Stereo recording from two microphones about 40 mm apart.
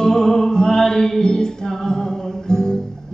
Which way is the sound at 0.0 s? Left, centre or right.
Centre.